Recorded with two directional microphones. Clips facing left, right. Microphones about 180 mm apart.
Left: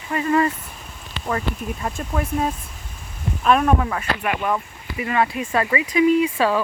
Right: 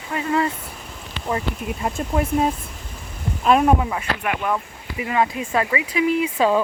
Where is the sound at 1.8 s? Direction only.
15° right (ahead or behind).